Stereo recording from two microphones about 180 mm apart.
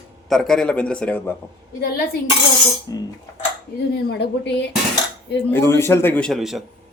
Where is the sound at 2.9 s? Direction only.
20° left (ahead or behind).